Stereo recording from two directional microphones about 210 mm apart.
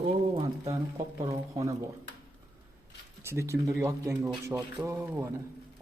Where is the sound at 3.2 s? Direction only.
15° right (ahead or behind).